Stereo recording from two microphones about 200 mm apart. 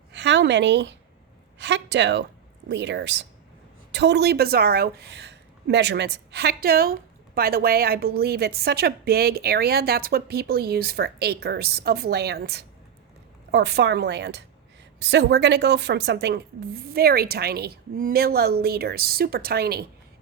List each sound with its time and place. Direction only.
0.1 s a woman's voice: 60° right (ahead or behind)